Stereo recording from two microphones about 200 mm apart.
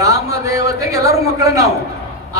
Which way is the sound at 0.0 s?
15° right (ahead or behind).